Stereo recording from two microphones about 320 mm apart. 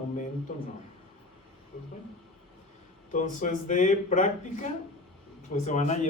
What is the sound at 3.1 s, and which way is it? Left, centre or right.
Speech, left.